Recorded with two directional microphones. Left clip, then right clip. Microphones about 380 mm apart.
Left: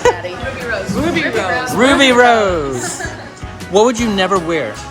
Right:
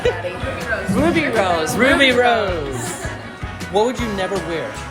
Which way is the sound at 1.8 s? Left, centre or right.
Centre.